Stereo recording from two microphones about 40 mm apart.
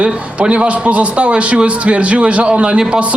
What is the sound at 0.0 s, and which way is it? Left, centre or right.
A man's voice, right.